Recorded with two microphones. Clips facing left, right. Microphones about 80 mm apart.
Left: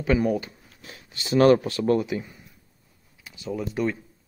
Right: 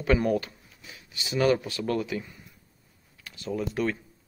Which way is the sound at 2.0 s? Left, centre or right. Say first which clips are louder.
Left 4 dB; left.